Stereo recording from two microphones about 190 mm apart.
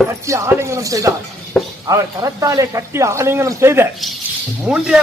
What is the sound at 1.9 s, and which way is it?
A man's voice, 15° right (ahead or behind).